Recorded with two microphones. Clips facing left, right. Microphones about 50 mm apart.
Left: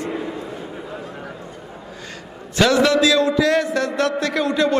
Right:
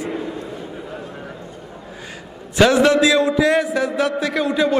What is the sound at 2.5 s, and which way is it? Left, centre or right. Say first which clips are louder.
A man's voice: right 2 dB; centre.